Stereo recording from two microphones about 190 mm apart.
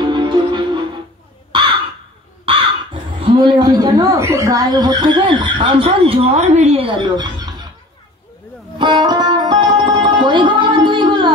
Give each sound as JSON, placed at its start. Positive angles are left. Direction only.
{"t": 0.0, "sound": "music", "side_deg": -25}
{"t": 1.5, "sound": "crow", "side_deg": -25}
{"t": 2.4, "sound": "speech", "side_deg": -30}
{"t": 8.7, "sound": "music", "side_deg": -25}